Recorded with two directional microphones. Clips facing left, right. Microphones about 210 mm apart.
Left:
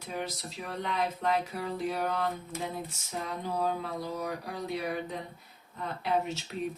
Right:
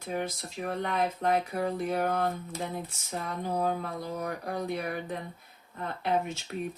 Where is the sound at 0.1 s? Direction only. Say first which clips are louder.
Right 3 dB; 50° right (ahead or behind).